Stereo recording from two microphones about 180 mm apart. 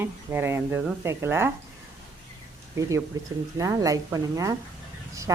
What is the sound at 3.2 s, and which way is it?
Speech, 20° right (ahead or behind).